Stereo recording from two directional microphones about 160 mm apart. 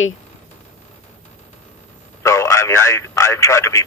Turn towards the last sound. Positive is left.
turn(degrees=20)  # may be behind; listen again after turning